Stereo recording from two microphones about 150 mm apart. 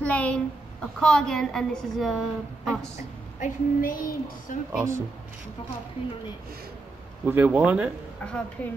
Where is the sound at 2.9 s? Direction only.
65° left (ahead or behind).